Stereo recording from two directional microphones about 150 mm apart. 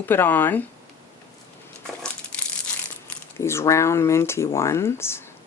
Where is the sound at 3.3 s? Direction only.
15° left (ahead or behind).